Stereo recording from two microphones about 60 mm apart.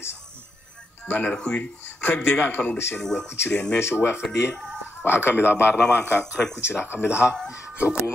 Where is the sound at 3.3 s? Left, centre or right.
Left.